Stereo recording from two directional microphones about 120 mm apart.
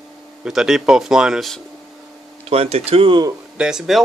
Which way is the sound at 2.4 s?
55° right (ahead or behind).